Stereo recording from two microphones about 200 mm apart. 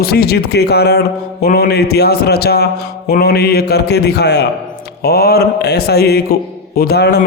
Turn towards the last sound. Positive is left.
turn(degrees=55)  # may be behind; listen again after turning